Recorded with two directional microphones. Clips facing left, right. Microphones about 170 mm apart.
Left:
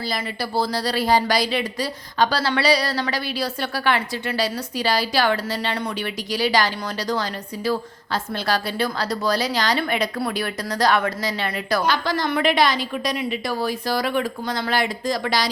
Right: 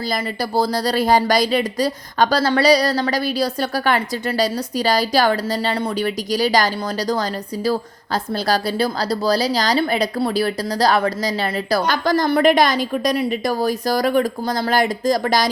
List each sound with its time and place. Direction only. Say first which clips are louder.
0.1 s speech: right 5 dB; 40° right (ahead or behind)
11.9 s a woman's voice: right 4 dB; 45° right (ahead or behind)